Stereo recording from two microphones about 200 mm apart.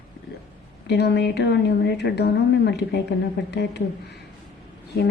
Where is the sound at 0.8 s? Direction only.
55° left (ahead or behind).